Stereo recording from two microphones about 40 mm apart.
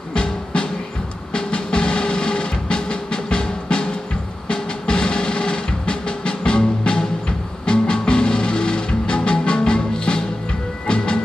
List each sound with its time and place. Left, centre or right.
0.1 s music: left